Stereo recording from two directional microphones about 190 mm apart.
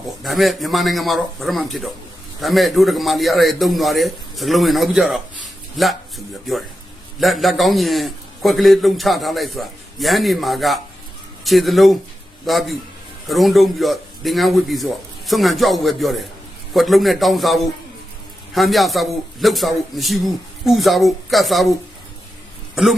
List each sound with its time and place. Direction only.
0.2 s a man's voice: centre (ahead or behind)
22.7 s a man's voice: centre (ahead or behind)